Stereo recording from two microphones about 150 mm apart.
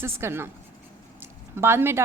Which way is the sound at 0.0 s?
15° right (ahead or behind).